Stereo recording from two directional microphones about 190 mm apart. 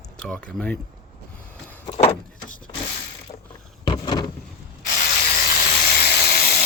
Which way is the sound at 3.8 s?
25° left (ahead or behind).